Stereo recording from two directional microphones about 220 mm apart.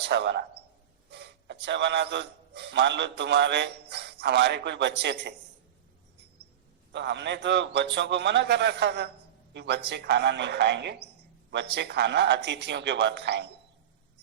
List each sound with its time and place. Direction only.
0.0 s a man's voice: 50° right (ahead or behind)
6.9 s a man's voice: 50° right (ahead or behind)